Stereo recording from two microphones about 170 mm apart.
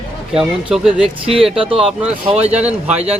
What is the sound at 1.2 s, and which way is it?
Speech, 30° right (ahead or behind).